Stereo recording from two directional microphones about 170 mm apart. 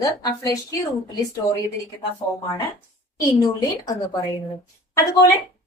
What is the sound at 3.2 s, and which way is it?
A woman's voice, 20° left (ahead or behind).